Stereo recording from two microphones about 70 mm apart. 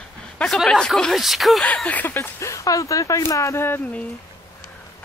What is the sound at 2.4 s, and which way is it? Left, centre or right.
Speech, left.